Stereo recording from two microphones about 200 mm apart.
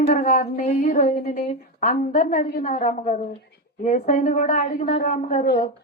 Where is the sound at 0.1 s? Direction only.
40° left (ahead or behind).